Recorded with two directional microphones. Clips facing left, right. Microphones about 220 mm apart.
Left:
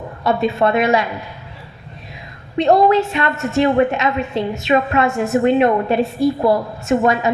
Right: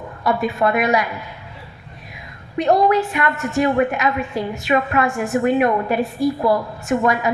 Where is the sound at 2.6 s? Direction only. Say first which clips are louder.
Left 3 dB; 25° left (ahead or behind).